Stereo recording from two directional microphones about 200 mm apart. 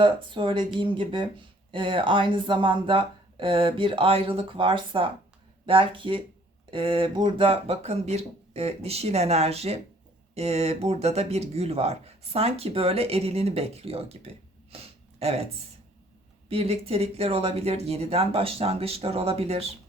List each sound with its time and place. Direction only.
0.0 s speech: 25° right (ahead or behind)
14.7 s a sound: 30° right (ahead or behind)
15.2 s speech: 30° right (ahead or behind)
16.5 s speech: 30° right (ahead or behind)